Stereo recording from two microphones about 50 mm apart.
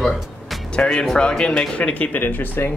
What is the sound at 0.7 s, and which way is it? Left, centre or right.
Speech, left.